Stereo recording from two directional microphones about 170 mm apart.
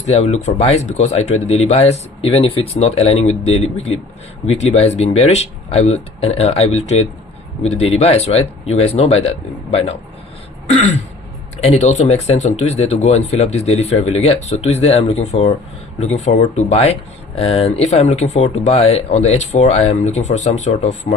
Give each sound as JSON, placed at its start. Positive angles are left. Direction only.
{"t": 0.0, "sound": "speech", "side_deg": 40}
{"t": 10.7, "sound": "throat clearing", "side_deg": 45}
{"t": 11.6, "sound": "speech", "side_deg": 40}